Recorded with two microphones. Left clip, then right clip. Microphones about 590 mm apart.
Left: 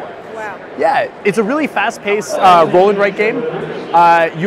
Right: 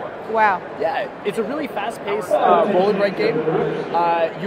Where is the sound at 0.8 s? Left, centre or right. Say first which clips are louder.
Left 11 dB; left.